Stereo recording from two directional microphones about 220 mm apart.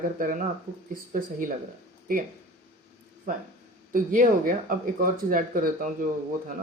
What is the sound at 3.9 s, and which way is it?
Speech, 40° right (ahead or behind).